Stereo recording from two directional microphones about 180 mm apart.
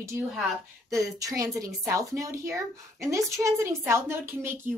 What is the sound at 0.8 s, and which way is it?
Speech, 20° right (ahead or behind).